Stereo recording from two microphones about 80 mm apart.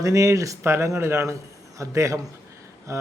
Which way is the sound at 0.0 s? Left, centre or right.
Right.